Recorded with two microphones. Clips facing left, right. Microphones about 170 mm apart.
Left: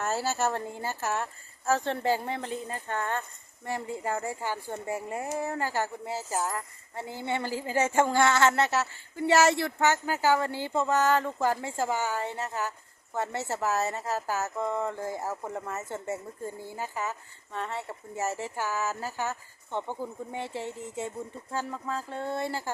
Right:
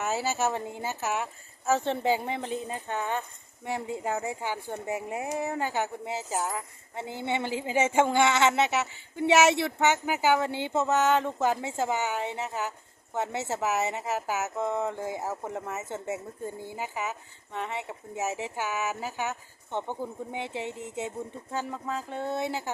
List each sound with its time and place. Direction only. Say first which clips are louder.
0.0 s speech: even; 5° right (ahead or behind)
4.0 s speech: even; 5° right (ahead or behind)
4.9 s speech: right 1 dB; 15° right (ahead or behind)
6.9 s speech: right 1 dB; 25° right (ahead or behind)
14.8 s speech: right 1 dB; centre (ahead or behind)
15.2 s speech: right 1 dB; 20° right (ahead or behind)